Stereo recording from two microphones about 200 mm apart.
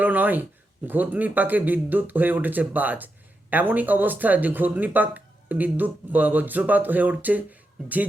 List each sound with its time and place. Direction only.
0.0 s speech: 10° right (ahead or behind)